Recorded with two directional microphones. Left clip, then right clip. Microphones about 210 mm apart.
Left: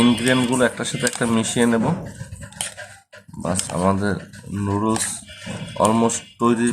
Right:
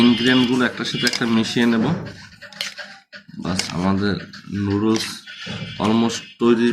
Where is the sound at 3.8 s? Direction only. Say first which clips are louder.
Left 3 dB; 45° left (ahead or behind).